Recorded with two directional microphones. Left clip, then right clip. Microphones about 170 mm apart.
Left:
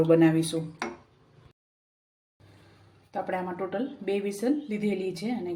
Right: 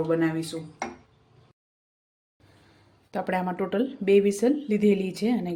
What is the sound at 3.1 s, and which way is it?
Speech, 50° right (ahead or behind).